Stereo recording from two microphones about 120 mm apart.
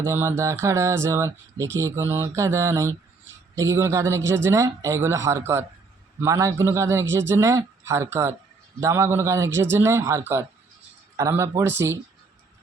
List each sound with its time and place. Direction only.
0.0 s speech: 20° right (ahead or behind)